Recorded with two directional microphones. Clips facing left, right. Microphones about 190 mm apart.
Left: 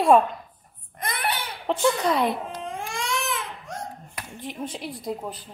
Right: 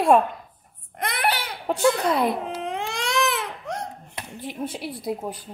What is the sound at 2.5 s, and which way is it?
Baby cry, 75° right (ahead or behind).